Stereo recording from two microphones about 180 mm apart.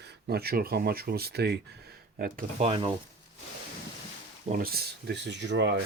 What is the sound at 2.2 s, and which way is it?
Speech, 50° right (ahead or behind).